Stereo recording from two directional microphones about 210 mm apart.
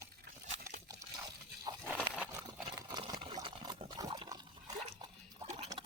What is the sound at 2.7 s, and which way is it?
Liquid, 20° right (ahead or behind).